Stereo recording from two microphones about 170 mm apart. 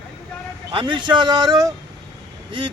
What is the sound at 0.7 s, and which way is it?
Speech, 30° right (ahead or behind).